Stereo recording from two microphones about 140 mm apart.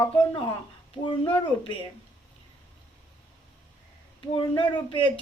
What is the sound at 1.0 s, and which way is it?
Speech, 40° left (ahead or behind).